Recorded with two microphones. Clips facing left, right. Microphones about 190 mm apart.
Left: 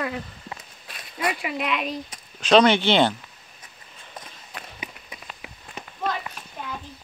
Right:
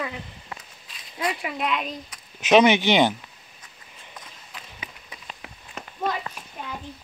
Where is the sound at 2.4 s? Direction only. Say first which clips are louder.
Even; 15° right (ahead or behind).